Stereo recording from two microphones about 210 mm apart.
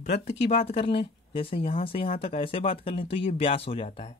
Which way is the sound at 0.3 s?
30° left (ahead or behind).